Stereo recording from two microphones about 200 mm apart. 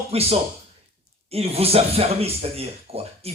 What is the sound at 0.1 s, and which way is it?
Speech, 30° right (ahead or behind).